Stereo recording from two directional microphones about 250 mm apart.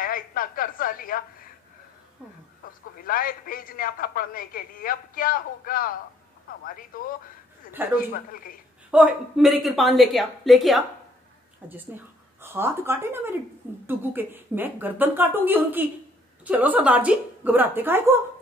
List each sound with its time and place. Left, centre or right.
0.0 s a man's voice: left
2.6 s a man's voice: left
8.9 s a woman's voice: centre